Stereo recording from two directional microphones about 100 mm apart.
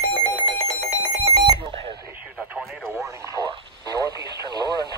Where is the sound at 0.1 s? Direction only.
50° left (ahead or behind).